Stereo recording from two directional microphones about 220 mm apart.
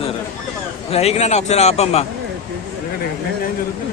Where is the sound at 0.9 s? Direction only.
30° left (ahead or behind).